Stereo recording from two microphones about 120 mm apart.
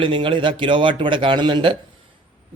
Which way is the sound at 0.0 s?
45° right (ahead or behind).